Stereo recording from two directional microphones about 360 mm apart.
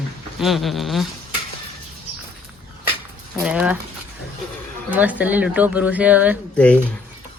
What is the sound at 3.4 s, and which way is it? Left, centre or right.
Speech, centre.